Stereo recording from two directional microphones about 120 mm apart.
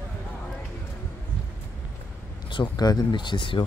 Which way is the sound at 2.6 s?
35° left (ahead or behind).